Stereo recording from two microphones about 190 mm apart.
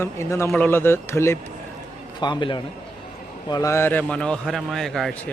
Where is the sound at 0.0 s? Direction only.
15° left (ahead or behind).